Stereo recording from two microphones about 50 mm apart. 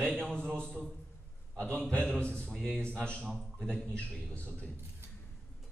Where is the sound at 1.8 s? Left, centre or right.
Centre.